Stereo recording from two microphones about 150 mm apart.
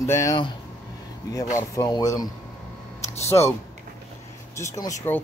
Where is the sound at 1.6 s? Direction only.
25° left (ahead or behind).